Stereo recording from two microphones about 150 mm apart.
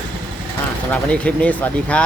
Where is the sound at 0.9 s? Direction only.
10° left (ahead or behind).